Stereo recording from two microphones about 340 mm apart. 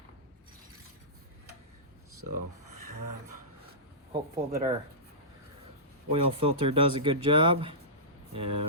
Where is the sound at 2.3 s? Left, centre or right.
Right.